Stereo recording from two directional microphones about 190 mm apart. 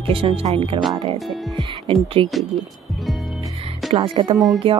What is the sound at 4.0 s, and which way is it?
Speech, 20° right (ahead or behind).